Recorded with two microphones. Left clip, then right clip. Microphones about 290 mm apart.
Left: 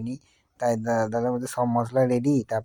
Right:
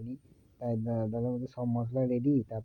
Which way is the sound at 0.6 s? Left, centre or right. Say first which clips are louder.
Left 11 dB; right.